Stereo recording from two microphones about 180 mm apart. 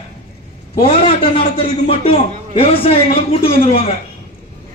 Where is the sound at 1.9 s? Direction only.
30° left (ahead or behind).